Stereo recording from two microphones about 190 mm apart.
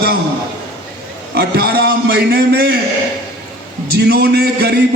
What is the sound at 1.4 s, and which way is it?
A man's voice, 55° right (ahead or behind).